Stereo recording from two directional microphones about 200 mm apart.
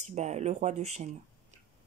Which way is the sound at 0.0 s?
35° right (ahead or behind).